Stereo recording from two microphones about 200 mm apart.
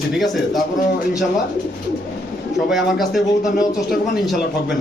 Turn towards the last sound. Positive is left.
turn(degrees=0)  # may be behind; listen again after turning